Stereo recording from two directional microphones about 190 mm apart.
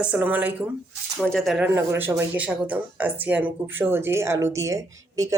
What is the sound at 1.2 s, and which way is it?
Speech, centre (ahead or behind).